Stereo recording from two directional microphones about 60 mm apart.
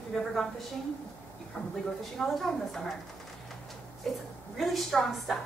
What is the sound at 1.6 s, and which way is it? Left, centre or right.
Speech, left.